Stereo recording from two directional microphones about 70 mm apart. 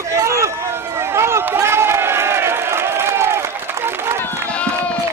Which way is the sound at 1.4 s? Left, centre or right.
Right.